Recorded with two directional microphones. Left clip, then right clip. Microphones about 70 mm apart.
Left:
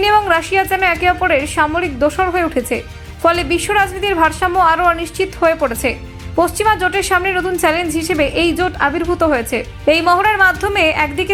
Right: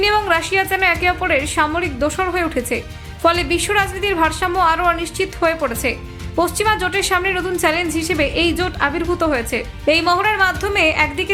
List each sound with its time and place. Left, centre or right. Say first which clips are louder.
0.0 s a woman's voice: left 3 dB; left